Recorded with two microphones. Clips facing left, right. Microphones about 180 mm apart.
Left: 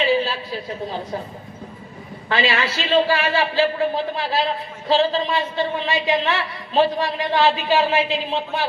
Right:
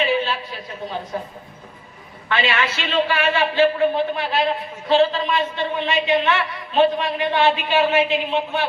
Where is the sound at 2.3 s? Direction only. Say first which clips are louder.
Left 1 dB; 35° left (ahead or behind).